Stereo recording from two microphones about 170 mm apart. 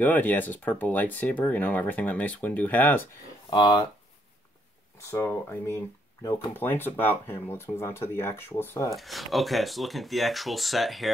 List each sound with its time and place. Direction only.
0.0 s speech: 10° left (ahead or behind)
3.4 s speech: 25° left (ahead or behind)
5.1 s speech: 15° left (ahead or behind)
8.9 s speech: centre (ahead or behind)